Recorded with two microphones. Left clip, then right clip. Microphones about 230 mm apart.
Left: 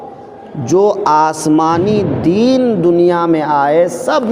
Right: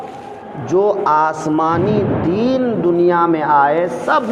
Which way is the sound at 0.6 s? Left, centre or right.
Left.